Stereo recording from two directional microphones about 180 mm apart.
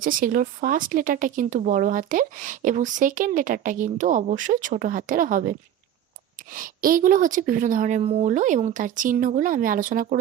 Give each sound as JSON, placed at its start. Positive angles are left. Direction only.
{"t": 0.0, "sound": "speech", "side_deg": -50}